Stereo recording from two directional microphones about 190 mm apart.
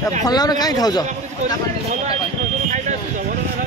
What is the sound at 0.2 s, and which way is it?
Speech, 20° left (ahead or behind).